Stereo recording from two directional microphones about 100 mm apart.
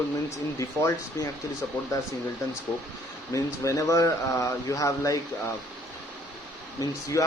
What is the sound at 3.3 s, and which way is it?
Speech, 30° left (ahead or behind).